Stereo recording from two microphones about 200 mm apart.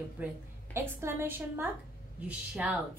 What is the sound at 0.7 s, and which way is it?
A woman's voice, 10° right (ahead or behind).